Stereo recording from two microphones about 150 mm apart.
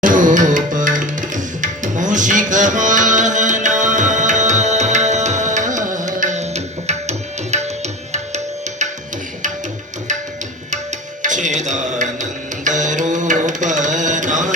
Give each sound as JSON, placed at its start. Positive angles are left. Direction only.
{"t": 0.0, "sound": "tabla", "side_deg": -60}
{"t": 11.2, "sound": "music", "side_deg": -55}